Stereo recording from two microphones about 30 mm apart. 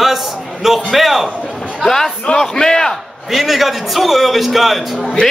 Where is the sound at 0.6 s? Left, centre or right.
Centre.